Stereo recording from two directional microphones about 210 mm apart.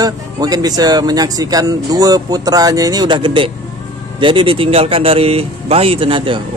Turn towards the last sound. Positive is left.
turn(degrees=-25)  # may be behind; listen again after turning